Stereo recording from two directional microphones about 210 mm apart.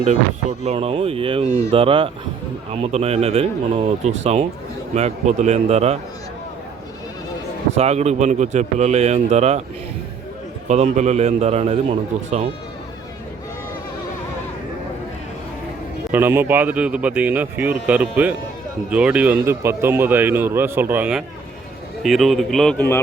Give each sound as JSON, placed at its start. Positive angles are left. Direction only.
{"t": 0.6, "sound": "a man's voice", "side_deg": -30}
{"t": 7.8, "sound": "a man's voice", "side_deg": -30}
{"t": 10.7, "sound": "a man's voice", "side_deg": -35}
{"t": 16.1, "sound": "a man's voice", "side_deg": -10}